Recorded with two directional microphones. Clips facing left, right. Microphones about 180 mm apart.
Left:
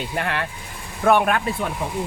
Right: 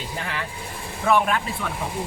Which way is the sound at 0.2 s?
65° left (ahead or behind).